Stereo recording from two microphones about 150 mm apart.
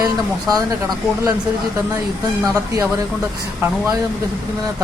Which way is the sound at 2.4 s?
25° right (ahead or behind).